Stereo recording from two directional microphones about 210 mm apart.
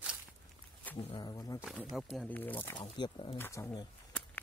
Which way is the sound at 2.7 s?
20° left (ahead or behind).